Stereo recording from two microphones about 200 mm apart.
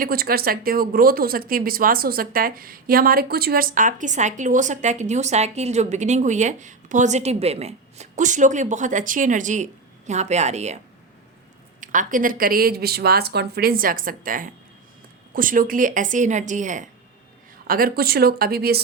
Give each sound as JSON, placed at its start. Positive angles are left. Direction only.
{"t": 0.0, "sound": "speech", "side_deg": -50}
{"t": 11.8, "sound": "speech", "side_deg": -40}